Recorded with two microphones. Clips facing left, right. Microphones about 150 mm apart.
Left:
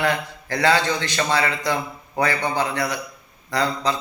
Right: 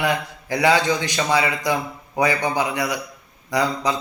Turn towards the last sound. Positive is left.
turn(degrees=-15)  # may be behind; listen again after turning